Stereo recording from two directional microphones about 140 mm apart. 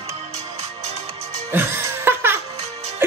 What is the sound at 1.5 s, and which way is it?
Music, 15° right (ahead or behind).